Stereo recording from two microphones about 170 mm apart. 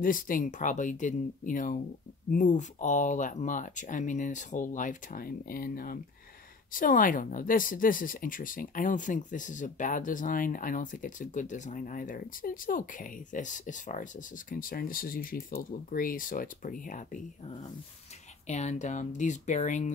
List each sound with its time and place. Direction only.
0.0 s speech: 55° left (ahead or behind)
18.5 s speech: 40° left (ahead or behind)